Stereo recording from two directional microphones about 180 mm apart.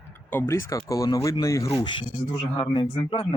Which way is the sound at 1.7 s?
30° left (ahead or behind).